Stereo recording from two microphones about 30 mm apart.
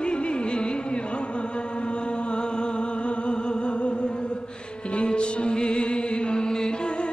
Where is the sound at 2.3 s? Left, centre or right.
Left.